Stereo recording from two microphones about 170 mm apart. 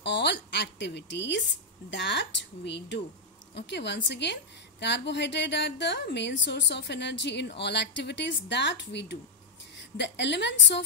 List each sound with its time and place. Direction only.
0.0 s a woman's voice: 90° left